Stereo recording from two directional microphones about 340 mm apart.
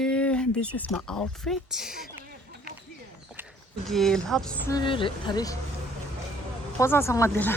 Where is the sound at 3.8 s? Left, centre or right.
Centre.